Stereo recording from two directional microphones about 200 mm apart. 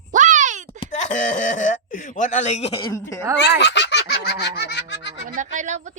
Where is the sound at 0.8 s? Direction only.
40° left (ahead or behind); by 3.2 s 15° left (ahead or behind).